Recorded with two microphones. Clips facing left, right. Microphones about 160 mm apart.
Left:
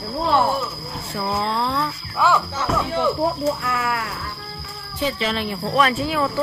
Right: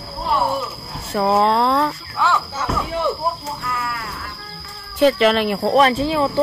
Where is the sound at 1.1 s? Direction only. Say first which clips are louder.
Right 8 dB; 65° right (ahead or behind).